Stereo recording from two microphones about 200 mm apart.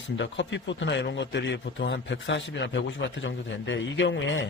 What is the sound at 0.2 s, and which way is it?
A man's voice, 65° left (ahead or behind).